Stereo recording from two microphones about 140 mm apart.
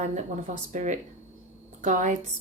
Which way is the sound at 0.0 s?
60° right (ahead or behind).